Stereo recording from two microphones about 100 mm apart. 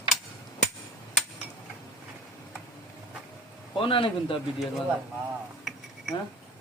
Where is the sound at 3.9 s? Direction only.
60° left (ahead or behind).